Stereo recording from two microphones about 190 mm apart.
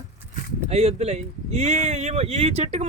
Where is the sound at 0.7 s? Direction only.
35° right (ahead or behind).